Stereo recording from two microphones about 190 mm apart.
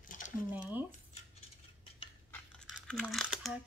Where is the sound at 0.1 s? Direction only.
45° left (ahead or behind).